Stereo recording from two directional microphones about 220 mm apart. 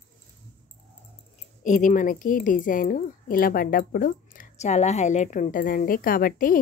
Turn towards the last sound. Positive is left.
turn(degrees=40)  # may be behind; listen again after turning